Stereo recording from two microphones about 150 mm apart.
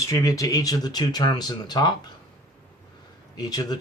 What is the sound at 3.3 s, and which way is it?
Speech, 25° left (ahead or behind).